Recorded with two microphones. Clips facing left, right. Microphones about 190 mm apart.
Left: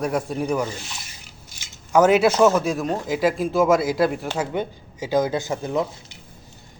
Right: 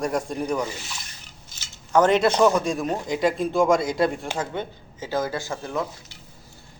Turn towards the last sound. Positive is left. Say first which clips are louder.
# left 4 dB
turn(degrees=20)  # may be behind; listen again after turning